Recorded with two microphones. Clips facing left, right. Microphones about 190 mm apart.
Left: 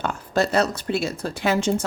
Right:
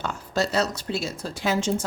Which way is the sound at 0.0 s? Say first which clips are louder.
Left 4 dB; 55° left (ahead or behind).